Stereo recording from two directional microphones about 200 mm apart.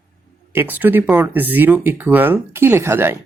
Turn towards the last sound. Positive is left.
turn(degrees=-10)  # may be behind; listen again after turning